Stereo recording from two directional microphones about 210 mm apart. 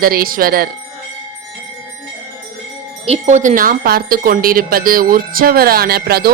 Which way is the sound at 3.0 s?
30° right (ahead or behind).